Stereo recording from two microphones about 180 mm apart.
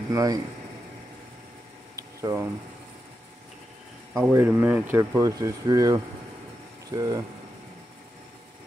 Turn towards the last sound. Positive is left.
turn(degrees=-20)  # may be behind; listen again after turning